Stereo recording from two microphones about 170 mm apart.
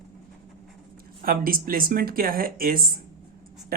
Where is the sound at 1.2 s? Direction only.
60° right (ahead or behind).